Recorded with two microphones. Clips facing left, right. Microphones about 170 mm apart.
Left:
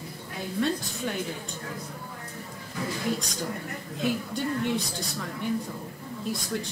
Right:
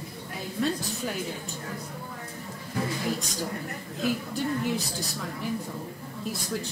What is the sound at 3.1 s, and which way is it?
A woman's voice, centre (ahead or behind).